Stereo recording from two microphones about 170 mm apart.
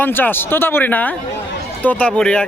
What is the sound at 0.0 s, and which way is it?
A man's voice, 10° left (ahead or behind).